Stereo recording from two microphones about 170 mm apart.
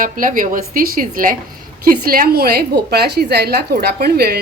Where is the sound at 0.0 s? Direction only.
50° right (ahead or behind).